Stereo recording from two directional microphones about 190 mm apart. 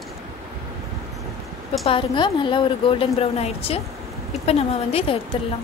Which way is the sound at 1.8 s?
25° left (ahead or behind).